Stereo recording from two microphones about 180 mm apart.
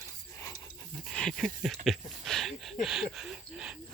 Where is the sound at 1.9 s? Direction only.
Centre (ahead or behind).